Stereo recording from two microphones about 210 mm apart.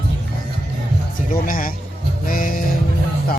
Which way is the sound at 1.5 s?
40° left (ahead or behind).